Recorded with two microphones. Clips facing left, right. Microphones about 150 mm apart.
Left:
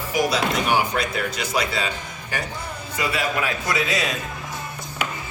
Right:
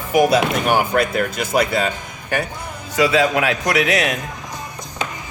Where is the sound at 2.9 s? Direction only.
90° right; by 4.2 s 70° right (ahead or behind).